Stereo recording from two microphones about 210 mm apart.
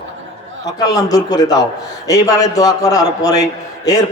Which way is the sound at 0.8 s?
15° left (ahead or behind).